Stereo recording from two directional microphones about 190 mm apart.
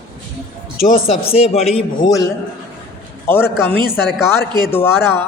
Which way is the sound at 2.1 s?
15° left (ahead or behind).